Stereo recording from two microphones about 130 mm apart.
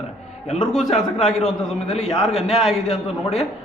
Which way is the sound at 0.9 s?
60° left (ahead or behind).